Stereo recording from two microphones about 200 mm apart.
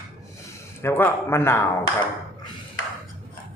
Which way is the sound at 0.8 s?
10° left (ahead or behind).